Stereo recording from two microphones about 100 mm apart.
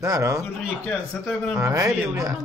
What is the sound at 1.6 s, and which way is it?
Speech, 30° right (ahead or behind).